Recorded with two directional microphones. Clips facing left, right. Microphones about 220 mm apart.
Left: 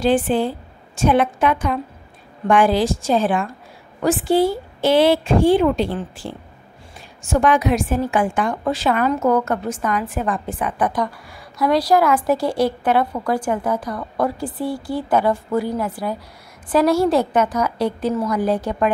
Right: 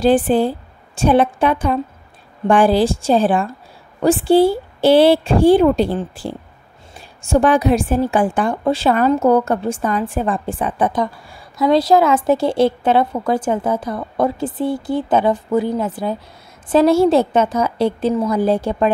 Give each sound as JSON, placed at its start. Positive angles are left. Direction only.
{"t": 0.0, "sound": "a woman's voice", "side_deg": -35}